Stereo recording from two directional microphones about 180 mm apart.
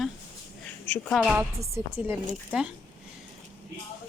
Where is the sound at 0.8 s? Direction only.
10° left (ahead or behind).